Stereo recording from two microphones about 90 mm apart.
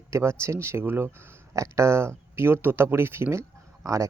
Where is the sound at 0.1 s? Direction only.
30° right (ahead or behind).